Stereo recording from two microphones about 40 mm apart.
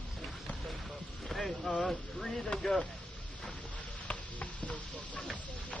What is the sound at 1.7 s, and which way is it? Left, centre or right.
Speech, centre.